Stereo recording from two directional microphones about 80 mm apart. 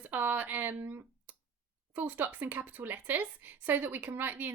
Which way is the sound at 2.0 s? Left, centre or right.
Right.